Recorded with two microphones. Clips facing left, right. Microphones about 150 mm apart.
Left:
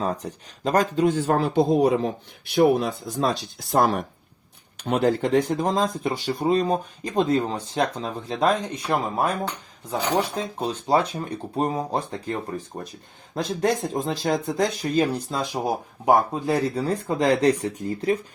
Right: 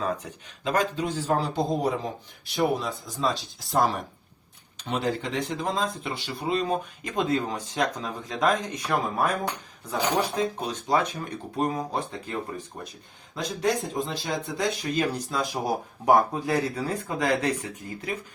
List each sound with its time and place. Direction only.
0.0 s a man's voice: 35° left (ahead or behind)
13.3 s a man's voice: 45° left (ahead or behind)
14.9 s speech: 30° left (ahead or behind)
17.4 s speech: 35° left (ahead or behind)